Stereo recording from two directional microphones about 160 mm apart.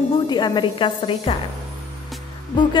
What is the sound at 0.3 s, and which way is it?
A woman's voice, 30° left (ahead or behind).